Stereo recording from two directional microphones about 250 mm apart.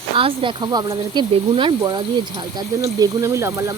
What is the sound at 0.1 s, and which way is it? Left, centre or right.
Speech, right.